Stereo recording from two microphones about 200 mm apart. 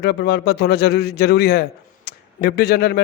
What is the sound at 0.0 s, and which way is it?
Speech, 50° left (ahead or behind).